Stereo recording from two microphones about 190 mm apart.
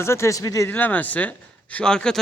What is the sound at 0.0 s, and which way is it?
A man's voice, 15° left (ahead or behind).